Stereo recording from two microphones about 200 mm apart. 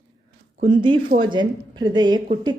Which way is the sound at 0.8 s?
25° right (ahead or behind).